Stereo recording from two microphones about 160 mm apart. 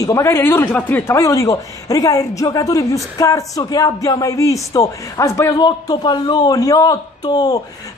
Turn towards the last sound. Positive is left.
turn(degrees=25)  # may be behind; listen again after turning